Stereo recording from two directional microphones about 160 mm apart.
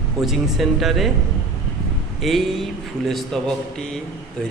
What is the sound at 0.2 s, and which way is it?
Speech, centre (ahead or behind).